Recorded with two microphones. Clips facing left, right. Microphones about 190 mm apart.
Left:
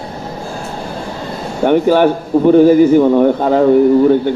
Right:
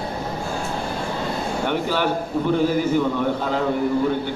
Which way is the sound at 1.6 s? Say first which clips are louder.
Left 14 dB; 50° left (ahead or behind).